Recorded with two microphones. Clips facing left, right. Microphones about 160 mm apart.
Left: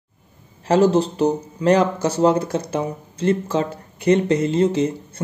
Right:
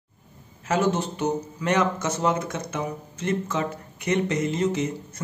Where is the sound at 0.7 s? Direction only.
35° left (ahead or behind).